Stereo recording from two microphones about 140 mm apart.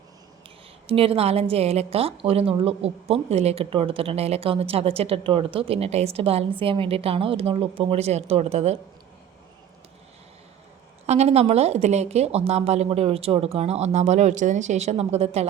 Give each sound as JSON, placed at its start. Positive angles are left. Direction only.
{"t": 0.9, "sound": "a woman's voice", "side_deg": -45}
{"t": 11.0, "sound": "a woman's voice", "side_deg": -50}